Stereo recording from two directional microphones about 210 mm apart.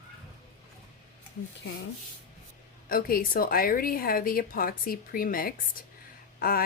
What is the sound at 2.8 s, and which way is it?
A woman's voice, 45° left (ahead or behind).